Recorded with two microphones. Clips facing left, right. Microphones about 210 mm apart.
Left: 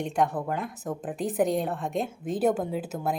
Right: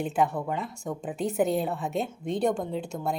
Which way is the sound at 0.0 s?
5° right (ahead or behind).